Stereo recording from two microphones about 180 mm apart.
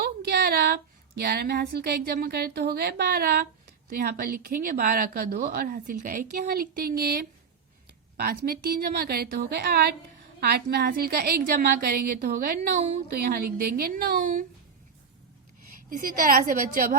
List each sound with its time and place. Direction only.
0.0 s a woman's voice: 65° right (ahead or behind)
15.9 s a woman's voice: 50° right (ahead or behind)